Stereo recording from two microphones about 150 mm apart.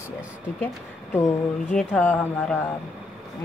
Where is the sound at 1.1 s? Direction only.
15° left (ahead or behind).